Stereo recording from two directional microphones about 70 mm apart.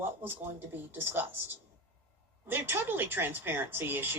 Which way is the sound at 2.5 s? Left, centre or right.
Right.